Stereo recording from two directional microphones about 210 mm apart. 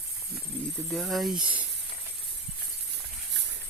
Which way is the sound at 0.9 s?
Centre (ahead or behind).